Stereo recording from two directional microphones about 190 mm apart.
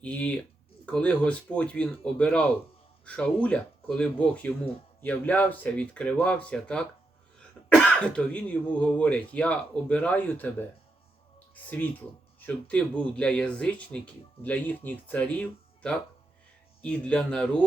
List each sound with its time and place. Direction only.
0.0 s speech: 5° left (ahead or behind)
11.5 s speech: 10° left (ahead or behind)